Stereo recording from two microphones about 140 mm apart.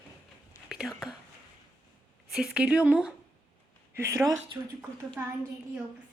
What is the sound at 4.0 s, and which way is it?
Speech, 20° right (ahead or behind).